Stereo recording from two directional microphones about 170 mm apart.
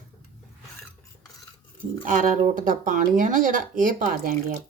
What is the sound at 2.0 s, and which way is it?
Speech, 50° right (ahead or behind).